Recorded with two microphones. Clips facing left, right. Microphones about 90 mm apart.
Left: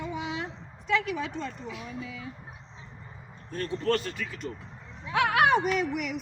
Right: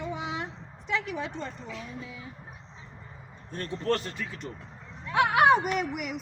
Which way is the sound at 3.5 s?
20° right (ahead or behind).